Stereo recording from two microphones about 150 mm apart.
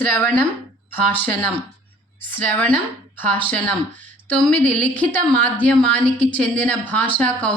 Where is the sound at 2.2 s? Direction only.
15° left (ahead or behind).